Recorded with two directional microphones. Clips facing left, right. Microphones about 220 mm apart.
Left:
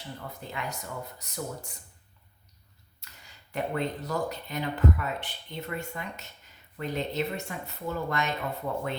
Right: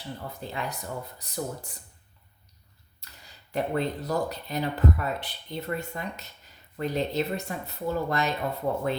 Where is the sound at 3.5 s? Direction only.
35° right (ahead or behind).